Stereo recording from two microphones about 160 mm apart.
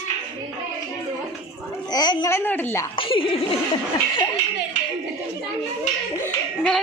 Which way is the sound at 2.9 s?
35° left (ahead or behind).